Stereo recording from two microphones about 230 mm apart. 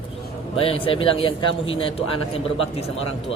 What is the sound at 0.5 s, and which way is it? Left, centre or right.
Speech, left.